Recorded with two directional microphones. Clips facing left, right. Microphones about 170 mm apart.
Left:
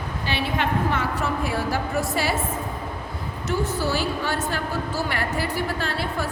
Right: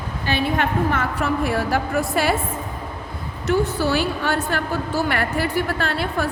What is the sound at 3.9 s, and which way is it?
A woman's voice, 60° right (ahead or behind).